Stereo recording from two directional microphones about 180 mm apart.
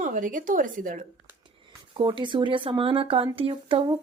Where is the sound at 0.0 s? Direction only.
45° right (ahead or behind).